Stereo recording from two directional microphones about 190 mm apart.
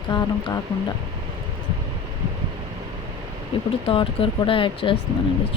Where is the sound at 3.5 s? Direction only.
30° left (ahead or behind).